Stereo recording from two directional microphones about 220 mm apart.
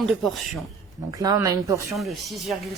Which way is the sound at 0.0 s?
Centre (ahead or behind).